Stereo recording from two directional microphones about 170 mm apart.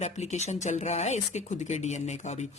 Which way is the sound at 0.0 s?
40° left (ahead or behind).